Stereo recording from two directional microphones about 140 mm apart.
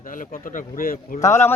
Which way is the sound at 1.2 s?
20° left (ahead or behind).